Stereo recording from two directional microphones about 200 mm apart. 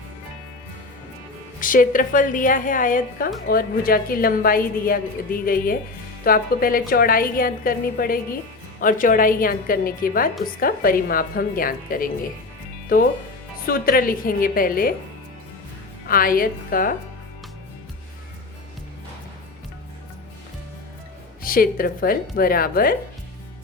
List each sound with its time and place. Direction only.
1.6 s a woman's voice: 40° left (ahead or behind)
16.0 s a woman's voice: 45° left (ahead or behind)
21.4 s a woman's voice: 45° left (ahead or behind)